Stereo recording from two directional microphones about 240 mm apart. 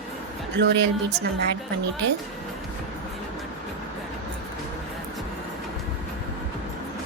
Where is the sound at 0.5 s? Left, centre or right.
Right.